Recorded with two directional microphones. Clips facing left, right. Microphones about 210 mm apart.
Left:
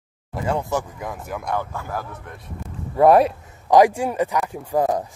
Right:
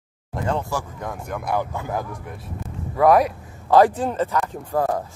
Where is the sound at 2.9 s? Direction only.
30° left (ahead or behind).